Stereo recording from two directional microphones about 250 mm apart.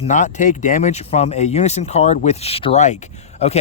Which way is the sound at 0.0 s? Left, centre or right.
Left.